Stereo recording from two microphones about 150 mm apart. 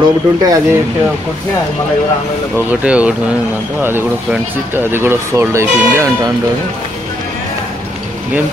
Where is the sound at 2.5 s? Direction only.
10° right (ahead or behind).